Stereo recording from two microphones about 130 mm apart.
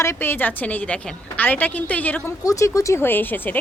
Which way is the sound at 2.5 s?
25° left (ahead or behind).